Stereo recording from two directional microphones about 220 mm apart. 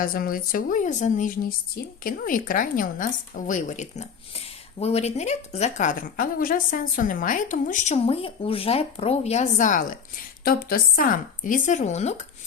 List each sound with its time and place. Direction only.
0.0 s speech: 40° left (ahead or behind)